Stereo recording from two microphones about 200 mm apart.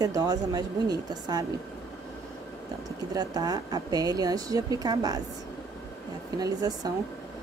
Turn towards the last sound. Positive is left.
turn(degrees=-20)  # may be behind; listen again after turning